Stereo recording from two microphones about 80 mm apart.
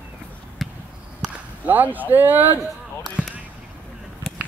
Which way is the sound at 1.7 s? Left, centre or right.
Right.